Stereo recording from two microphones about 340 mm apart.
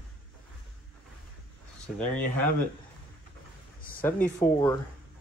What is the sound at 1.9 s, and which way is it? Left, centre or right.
Speech, centre.